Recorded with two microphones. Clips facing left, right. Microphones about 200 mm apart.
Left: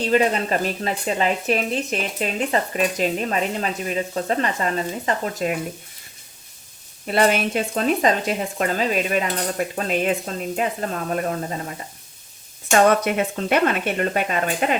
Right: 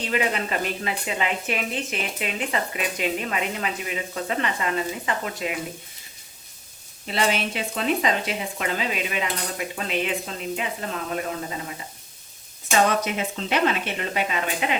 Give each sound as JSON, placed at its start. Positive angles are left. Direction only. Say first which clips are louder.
{"t": 0.1, "sound": "a woman's voice", "louder": "left 6 dB", "side_deg": 35}
{"t": 7.1, "sound": "speech", "louder": "left 6 dB", "side_deg": 50}
{"t": 12.7, "sound": "speech", "louder": "left 5 dB", "side_deg": 55}